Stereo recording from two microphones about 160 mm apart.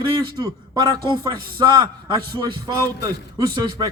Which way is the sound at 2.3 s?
25° right (ahead or behind).